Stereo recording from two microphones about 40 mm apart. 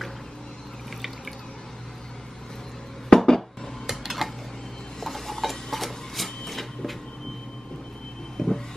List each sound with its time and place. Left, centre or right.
3.1 s a sound: centre
3.8 s dishes: centre
5.0 s printer: centre
8.4 s vehicle: centre